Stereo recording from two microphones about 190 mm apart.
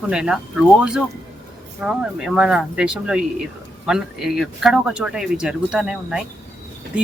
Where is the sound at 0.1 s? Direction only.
5° right (ahead or behind).